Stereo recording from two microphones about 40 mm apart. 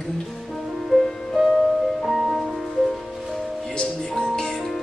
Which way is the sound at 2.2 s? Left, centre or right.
Centre.